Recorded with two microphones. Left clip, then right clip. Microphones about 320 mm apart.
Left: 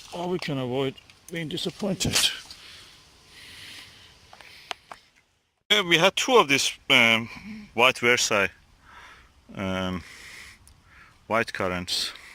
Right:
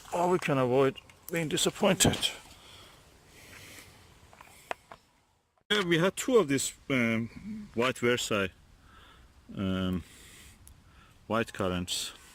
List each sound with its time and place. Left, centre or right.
0.1 s speech: right
5.6 s speech: centre
9.6 s speech: centre